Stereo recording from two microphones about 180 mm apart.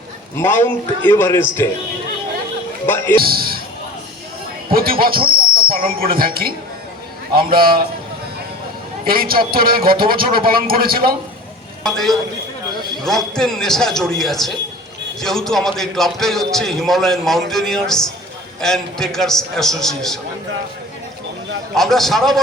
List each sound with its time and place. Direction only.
0.3 s a man's voice: 15° left (ahead or behind)
2.8 s music: 10° left (ahead or behind)
3.2 s a man's voice: 55° right (ahead or behind)
4.7 s speech: 55° right (ahead or behind)
5.3 s whistle: 55° right (ahead or behind)
6.1 s speech: 55° right (ahead or behind)
9.0 s speech: 55° right (ahead or behind)
11.8 s a man's voice: centre (ahead or behind)
21.8 s a man's voice: centre (ahead or behind)